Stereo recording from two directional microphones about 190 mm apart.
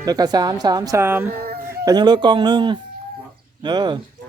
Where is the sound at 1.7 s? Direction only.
20° right (ahead or behind).